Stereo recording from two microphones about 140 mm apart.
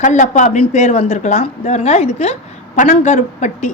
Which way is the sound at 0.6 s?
50° left (ahead or behind).